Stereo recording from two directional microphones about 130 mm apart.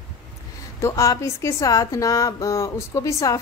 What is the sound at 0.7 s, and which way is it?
A woman's voice, 25° left (ahead or behind).